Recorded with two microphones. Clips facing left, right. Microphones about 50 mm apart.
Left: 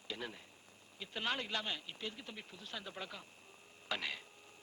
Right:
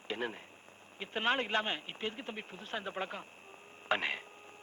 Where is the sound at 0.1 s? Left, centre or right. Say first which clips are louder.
Right 7 dB; right.